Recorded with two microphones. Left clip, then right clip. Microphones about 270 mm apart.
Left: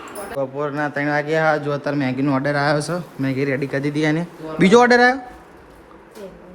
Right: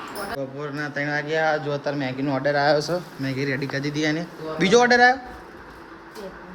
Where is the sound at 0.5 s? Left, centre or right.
Centre.